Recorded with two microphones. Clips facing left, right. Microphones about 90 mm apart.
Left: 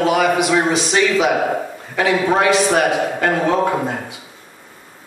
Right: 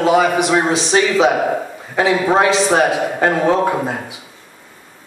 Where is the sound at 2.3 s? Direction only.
25° right (ahead or behind).